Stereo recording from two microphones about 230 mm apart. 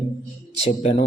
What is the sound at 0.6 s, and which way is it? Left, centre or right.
Speech, left.